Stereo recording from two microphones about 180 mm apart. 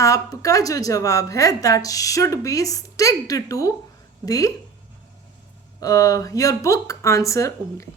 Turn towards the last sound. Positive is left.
turn(degrees=15)  # may be behind; listen again after turning